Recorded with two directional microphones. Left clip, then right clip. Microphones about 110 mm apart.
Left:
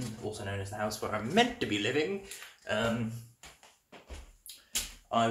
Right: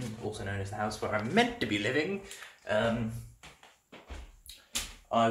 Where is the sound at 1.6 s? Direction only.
20° right (ahead or behind).